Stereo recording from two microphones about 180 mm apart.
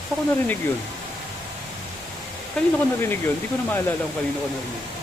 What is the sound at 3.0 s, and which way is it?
Speech, 10° left (ahead or behind).